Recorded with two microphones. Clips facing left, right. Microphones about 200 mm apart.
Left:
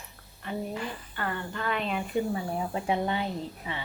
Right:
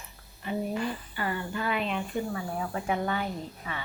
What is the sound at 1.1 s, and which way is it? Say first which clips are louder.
Speech: right 2 dB; 10° right (ahead or behind).